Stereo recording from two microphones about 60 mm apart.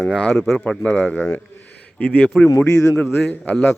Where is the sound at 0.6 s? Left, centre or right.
Left.